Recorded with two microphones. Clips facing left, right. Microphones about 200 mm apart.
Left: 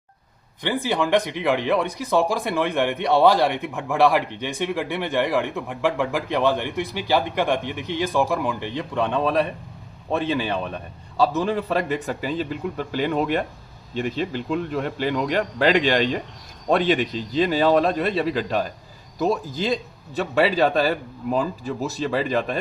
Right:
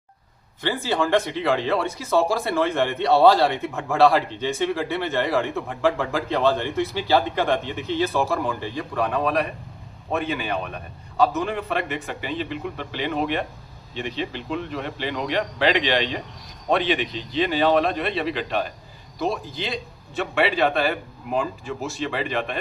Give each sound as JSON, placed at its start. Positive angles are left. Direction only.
{"t": 0.6, "sound": "a man's voice", "side_deg": 15}